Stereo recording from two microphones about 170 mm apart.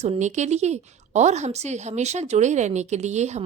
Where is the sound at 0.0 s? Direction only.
40° right (ahead or behind).